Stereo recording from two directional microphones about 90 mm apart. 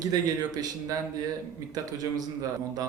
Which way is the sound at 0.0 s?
45° right (ahead or behind).